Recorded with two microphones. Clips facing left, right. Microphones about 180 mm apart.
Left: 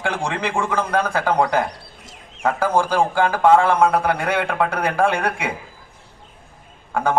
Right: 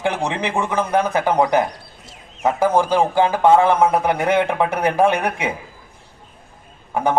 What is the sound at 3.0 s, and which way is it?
A man's voice, 20° right (ahead or behind).